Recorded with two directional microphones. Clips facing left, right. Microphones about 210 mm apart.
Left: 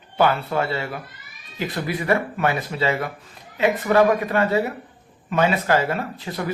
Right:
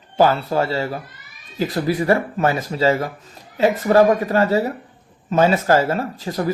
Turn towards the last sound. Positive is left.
turn(degrees=-40)  # may be behind; listen again after turning